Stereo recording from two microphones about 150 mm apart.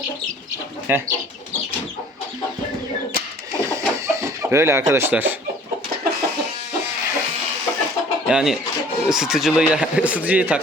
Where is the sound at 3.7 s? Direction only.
20° right (ahead or behind).